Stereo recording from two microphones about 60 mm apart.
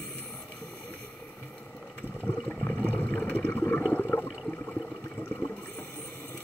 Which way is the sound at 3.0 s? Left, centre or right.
Left.